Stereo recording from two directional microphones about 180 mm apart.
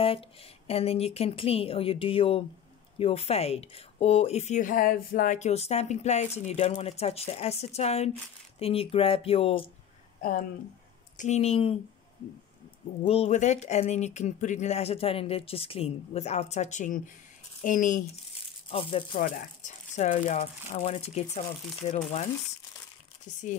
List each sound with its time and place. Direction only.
0.7 s speech: 35° left (ahead or behind)
11.1 s speech: 40° left (ahead or behind)
13.0 s speech: 35° left (ahead or behind)
18.7 s speech: 30° left (ahead or behind)
19.1 s speech: 45° left (ahead or behind)